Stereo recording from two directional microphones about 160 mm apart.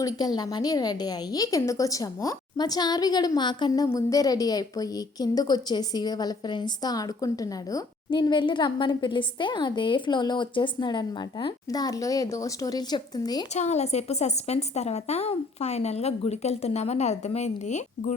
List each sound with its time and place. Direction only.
0.0 s a woman's voice: 25° left (ahead or behind)
13.5 s a woman's voice: 45° left (ahead or behind)